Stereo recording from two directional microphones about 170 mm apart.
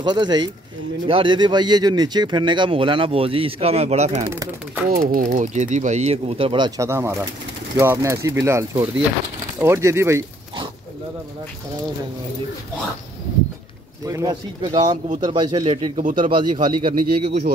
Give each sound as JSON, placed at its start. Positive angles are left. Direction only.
{"t": 0.0, "sound": "speech", "side_deg": -25}
{"t": 4.3, "sound": "speech", "side_deg": -15}
{"t": 4.8, "sound": "speech", "side_deg": -55}
{"t": 6.8, "sound": "speech", "side_deg": -15}
{"t": 14.0, "sound": "speech", "side_deg": -20}